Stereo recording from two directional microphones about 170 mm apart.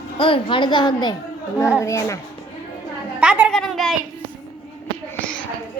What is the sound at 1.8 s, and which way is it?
Child singing, 20° left (ahead or behind).